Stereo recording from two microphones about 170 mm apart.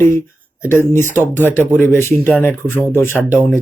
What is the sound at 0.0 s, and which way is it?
Speech, 15° left (ahead or behind).